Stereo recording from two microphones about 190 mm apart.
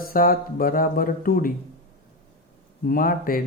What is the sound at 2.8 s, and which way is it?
Speech, 50° left (ahead or behind).